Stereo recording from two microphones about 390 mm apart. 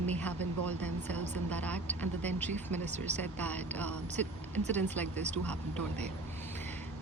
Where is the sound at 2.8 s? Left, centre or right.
Centre.